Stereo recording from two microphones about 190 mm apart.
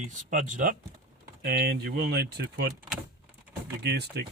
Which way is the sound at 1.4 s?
55° right (ahead or behind).